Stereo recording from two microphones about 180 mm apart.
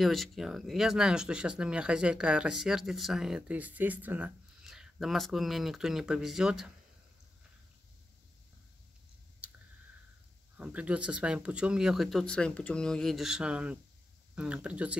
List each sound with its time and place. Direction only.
0.0 s speech: centre (ahead or behind)
9.4 s clicking: 5° right (ahead or behind)
10.6 s speech: 5° right (ahead or behind)